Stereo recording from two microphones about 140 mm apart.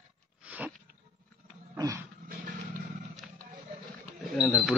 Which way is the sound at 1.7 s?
25° right (ahead or behind).